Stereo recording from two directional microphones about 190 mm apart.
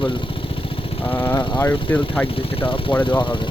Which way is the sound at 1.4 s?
25° left (ahead or behind).